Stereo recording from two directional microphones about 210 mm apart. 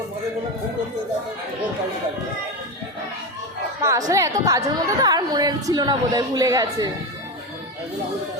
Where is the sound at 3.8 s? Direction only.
15° right (ahead or behind).